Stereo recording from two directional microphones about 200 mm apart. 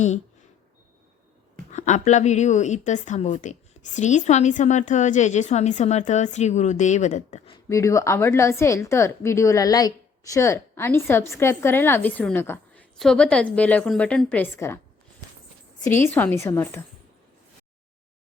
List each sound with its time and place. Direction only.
1.7 s a woman's voice: 35° left (ahead or behind)
7.7 s a woman's voice: 15° left (ahead or behind)
16.1 s a woman's voice: 10° left (ahead or behind)